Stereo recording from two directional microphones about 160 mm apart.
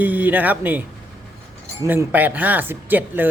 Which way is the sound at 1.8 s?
15° right (ahead or behind).